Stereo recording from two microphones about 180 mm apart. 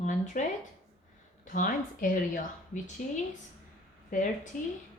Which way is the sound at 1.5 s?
50° left (ahead or behind).